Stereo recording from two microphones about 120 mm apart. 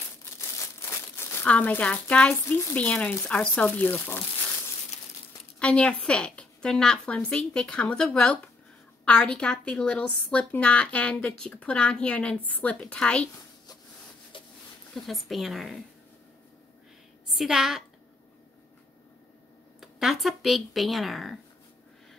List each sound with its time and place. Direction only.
0.2 s crumpling: 20° left (ahead or behind)
2.4 s speech: 20° left (ahead or behind)
5.6 s speech: 10° left (ahead or behind)
14.3 s a sound: 45° left (ahead or behind)
15.0 s speech: centre (ahead or behind)
17.3 s a woman's voice: 5° right (ahead or behind)
19.8 s speech: centre (ahead or behind)